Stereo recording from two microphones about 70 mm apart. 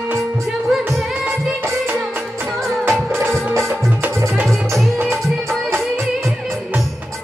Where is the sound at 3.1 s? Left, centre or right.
Right.